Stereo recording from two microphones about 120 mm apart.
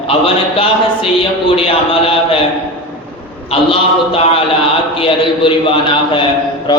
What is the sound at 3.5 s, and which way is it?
Speech, 50° left (ahead or behind).